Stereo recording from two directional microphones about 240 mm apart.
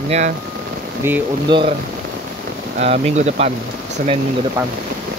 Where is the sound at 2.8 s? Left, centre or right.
Right.